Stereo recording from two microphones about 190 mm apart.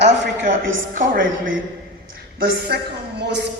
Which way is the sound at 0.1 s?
40° right (ahead or behind).